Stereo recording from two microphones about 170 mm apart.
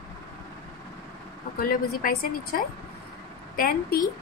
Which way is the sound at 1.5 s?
55° left (ahead or behind).